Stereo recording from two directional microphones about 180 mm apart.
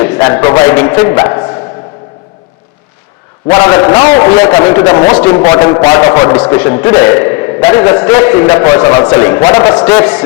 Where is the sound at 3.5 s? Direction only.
20° left (ahead or behind).